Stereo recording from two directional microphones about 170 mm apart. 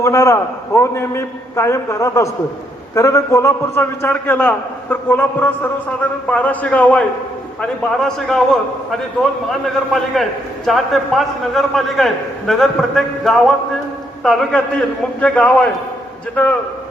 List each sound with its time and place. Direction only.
0.0 s a man's voice: 15° left (ahead or behind); by 13.4 s centre (ahead or behind)
15.2 s a man's voice: 10° left (ahead or behind)